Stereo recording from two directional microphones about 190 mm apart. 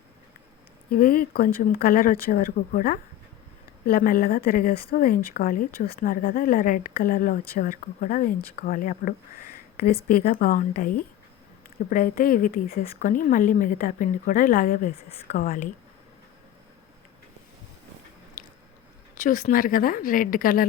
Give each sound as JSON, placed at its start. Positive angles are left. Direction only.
{"t": 0.9, "sound": "speech", "side_deg": 50}
{"t": 19.1, "sound": "speech", "side_deg": 45}